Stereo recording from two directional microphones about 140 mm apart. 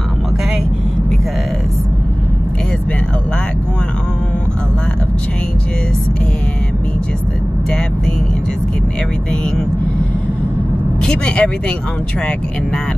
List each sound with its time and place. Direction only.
11.1 s vehicle: 5° left (ahead or behind)